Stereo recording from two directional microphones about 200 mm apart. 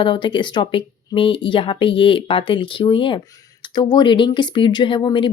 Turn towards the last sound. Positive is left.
turn(degrees=25)  # may be behind; listen again after turning